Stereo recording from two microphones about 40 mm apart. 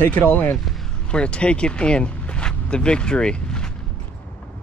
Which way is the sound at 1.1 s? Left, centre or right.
Left.